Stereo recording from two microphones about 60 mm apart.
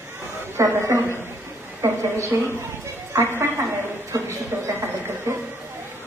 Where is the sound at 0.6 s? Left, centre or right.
Right.